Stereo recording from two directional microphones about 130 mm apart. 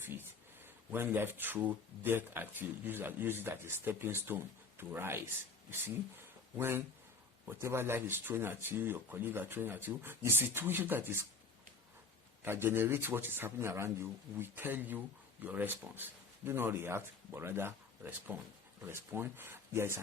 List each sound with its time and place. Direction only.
0.0 s speech: 15° right (ahead or behind)
6.6 s speech: 20° right (ahead or behind)
12.4 s speech: 15° right (ahead or behind)